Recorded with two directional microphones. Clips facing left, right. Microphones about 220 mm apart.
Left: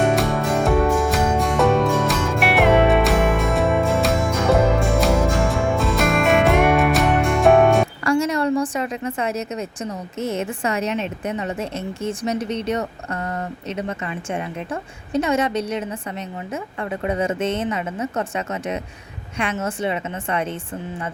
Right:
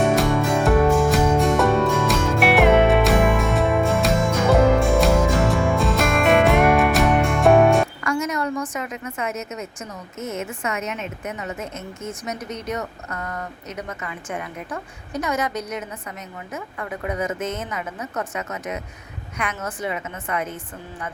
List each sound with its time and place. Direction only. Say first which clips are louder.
0.0 s music: even; centre (ahead or behind)
8.0 s a sound: left 5 dB; 30° left (ahead or behind)
10.2 s a woman's voice: left 4 dB; 30° left (ahead or behind)